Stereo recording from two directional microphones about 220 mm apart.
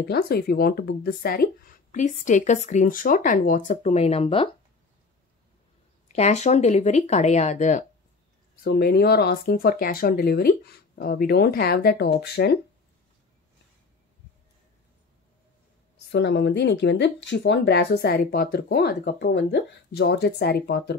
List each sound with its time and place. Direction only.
0.1 s speech: 45° left (ahead or behind); by 4.5 s 25° left (ahead or behind)
6.1 s speech: 30° left (ahead or behind)
8.6 s speech: 45° left (ahead or behind)
16.1 s speech: 50° left (ahead or behind)